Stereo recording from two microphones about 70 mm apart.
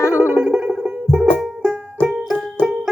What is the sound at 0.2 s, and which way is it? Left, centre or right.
Music, centre.